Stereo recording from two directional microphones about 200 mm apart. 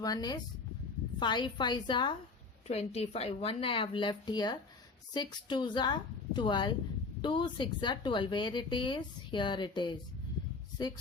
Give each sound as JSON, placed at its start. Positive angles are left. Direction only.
{"t": 0.0, "sound": "speech", "side_deg": 20}